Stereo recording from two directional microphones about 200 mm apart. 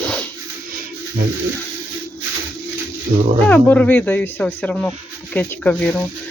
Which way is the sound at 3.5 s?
10° left (ahead or behind).